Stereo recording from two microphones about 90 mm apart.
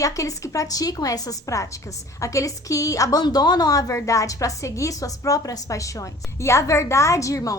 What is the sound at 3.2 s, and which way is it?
A woman's voice, 50° left (ahead or behind).